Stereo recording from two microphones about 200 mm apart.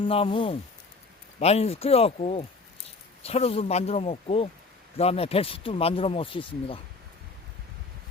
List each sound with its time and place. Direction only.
0.0 s speech: 25° left (ahead or behind)